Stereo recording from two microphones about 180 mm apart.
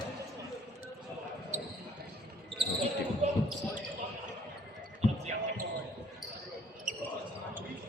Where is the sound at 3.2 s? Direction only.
40° right (ahead or behind).